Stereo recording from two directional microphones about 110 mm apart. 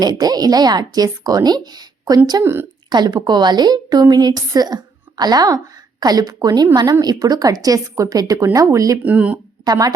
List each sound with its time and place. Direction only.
0.0 s a woman's voice: 35° right (ahead or behind)
2.4 s speech: 20° right (ahead or behind)
2.9 s a woman's voice: 45° right (ahead or behind)
9.0 s speech: 15° right (ahead or behind)
9.6 s a woman's voice: 35° right (ahead or behind)